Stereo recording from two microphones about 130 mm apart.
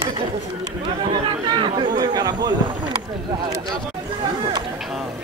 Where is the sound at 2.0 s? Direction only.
30° right (ahead or behind).